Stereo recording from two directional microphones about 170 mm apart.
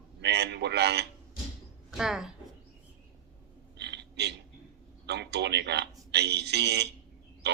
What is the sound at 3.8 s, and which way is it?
Burping, 90° right.